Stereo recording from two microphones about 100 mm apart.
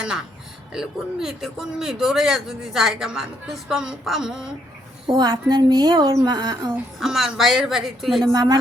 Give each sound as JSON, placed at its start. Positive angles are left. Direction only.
{"t": 0.7, "sound": "speech", "side_deg": -5}
{"t": 5.0, "sound": "a woman's voice", "side_deg": -50}
{"t": 7.0, "sound": "speech", "side_deg": -5}
{"t": 8.2, "sound": "a woman's voice", "side_deg": -45}